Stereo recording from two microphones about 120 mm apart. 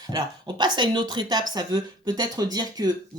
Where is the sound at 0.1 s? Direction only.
35° right (ahead or behind).